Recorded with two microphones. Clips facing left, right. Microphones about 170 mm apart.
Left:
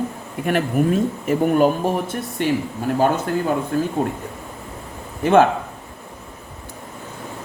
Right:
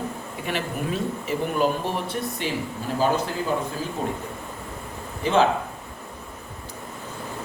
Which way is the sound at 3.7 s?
60° left (ahead or behind).